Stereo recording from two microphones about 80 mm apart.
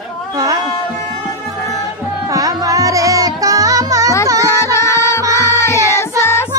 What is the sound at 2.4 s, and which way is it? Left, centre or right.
Music, right.